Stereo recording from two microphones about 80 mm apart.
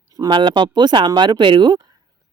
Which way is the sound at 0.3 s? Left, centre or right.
Right.